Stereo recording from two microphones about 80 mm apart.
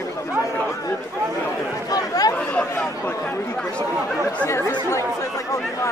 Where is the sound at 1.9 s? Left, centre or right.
Left.